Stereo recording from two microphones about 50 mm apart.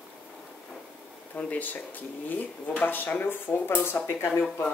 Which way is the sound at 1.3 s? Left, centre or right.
Left.